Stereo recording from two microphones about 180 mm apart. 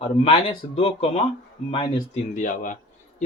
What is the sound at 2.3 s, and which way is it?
Speech, 45° left (ahead or behind).